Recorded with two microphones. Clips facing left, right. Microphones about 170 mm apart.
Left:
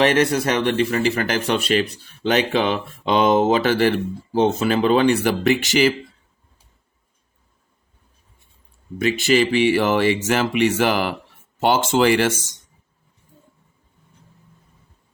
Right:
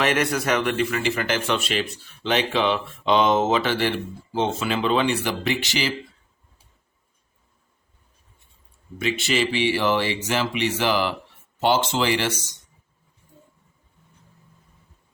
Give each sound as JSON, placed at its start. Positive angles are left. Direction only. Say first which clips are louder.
{"t": 0.0, "sound": "speech", "louder": "left 5 dB", "side_deg": 30}
{"t": 9.3, "sound": "speech", "louder": "left 7 dB", "side_deg": 45}